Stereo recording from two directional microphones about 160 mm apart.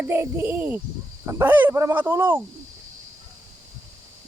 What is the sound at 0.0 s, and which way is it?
Speech, 15° right (ahead or behind).